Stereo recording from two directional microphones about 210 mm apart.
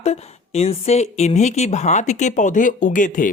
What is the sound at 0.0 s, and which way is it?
Speech, 30° left (ahead or behind).